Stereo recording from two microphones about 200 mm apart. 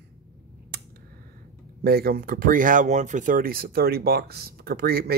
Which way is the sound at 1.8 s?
50° right (ahead or behind).